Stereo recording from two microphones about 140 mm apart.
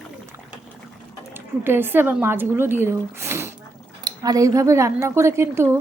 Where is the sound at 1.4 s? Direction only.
15° right (ahead or behind).